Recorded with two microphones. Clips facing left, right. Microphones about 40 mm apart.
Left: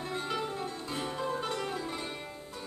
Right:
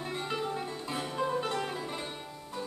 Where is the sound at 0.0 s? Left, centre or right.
Centre.